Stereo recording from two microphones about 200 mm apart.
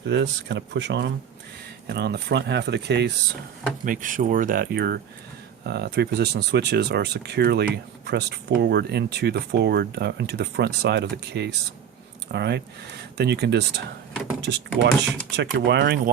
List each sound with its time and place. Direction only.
0.1 s speech: 60° right (ahead or behind)
3.8 s speech: 40° right (ahead or behind); by 16.0 s 60° right (ahead or behind)